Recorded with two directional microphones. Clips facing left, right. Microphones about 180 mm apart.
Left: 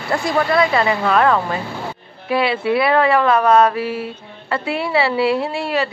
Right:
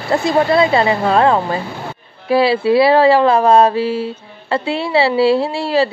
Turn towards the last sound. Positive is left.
turn(degrees=-30)  # may be behind; listen again after turning